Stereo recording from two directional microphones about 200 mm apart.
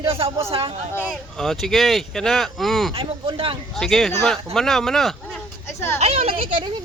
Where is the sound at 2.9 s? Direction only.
25° right (ahead or behind).